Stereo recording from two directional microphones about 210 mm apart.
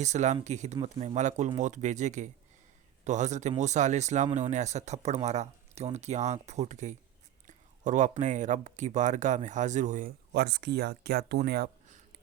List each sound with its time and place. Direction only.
0.0 s speech: 35° right (ahead or behind)